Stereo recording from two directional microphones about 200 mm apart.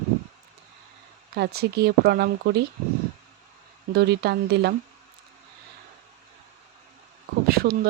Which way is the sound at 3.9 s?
55° right (ahead or behind).